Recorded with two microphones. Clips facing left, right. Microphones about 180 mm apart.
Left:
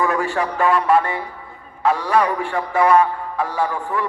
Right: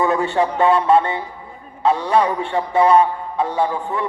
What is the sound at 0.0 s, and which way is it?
A man's voice, 25° right (ahead or behind).